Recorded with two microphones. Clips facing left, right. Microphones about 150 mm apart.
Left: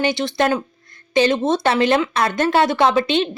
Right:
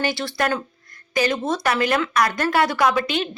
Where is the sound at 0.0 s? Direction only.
20° left (ahead or behind).